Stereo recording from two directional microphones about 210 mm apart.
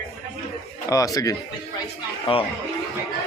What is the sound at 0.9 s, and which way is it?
Speech, 15° left (ahead or behind).